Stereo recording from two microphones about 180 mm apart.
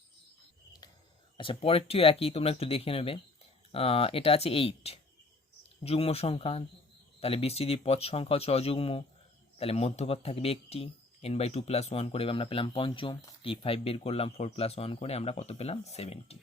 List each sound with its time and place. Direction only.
1.4 s speech: 30° left (ahead or behind)